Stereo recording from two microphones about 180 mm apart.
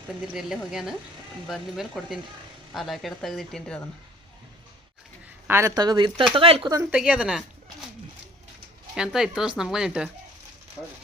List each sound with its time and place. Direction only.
0.3 s speech: centre (ahead or behind)
5.5 s speech: 15° right (ahead or behind)
6.9 s speech: 5° right (ahead or behind)
9.0 s speech: centre (ahead or behind)